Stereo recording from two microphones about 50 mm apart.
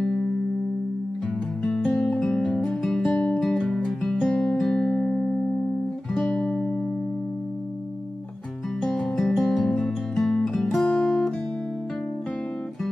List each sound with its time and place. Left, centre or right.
0.0 s music: centre
1.6 s music: centre
3.1 s music: left
3.5 s music: centre; by 6.8 s left
8.8 s music: centre
10.9 s guitar: left